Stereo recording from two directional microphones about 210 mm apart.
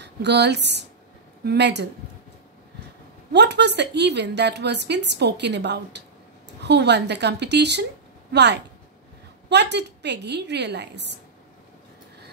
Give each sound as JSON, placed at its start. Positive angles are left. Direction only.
{"t": 0.0, "sound": "a woman's voice", "side_deg": -55}
{"t": 3.3, "sound": "a woman's voice", "side_deg": -55}